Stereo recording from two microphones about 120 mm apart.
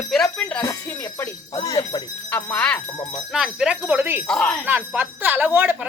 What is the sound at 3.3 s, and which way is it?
Speech, 5° right (ahead or behind).